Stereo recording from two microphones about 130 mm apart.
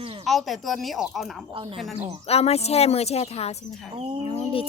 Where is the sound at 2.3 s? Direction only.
50° left (ahead or behind).